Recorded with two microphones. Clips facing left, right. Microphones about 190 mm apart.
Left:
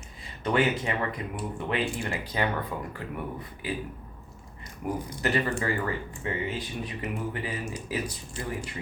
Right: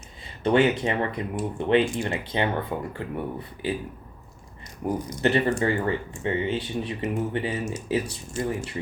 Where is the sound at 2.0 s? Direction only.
25° right (ahead or behind).